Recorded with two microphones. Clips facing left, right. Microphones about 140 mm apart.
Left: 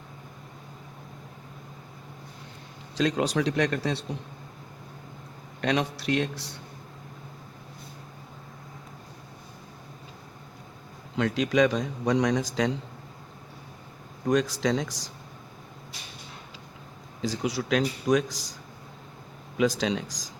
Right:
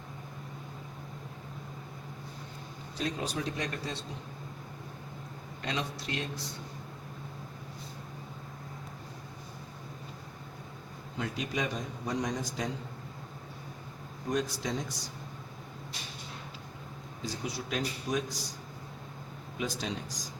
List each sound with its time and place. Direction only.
3.0 s speech: 90° left; by 4.0 s 75° left (ahead or behind)
5.6 s speech: 70° left (ahead or behind)
11.2 s a man's voice: 90° left
14.3 s a man's voice: 90° left
17.2 s a man's voice: 90° left
19.5 s a man's voice: 90° left